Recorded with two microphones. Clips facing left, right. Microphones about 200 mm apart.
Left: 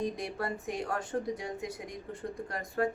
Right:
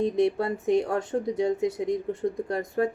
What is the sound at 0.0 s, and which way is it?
Speech, 25° right (ahead or behind).